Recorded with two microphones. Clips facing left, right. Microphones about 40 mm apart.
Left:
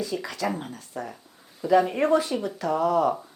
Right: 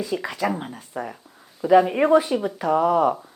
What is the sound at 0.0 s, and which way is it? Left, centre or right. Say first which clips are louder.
Speech: right 4 dB; right.